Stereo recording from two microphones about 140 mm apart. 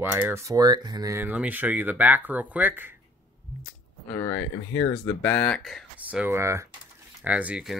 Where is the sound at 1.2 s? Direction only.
10° right (ahead or behind).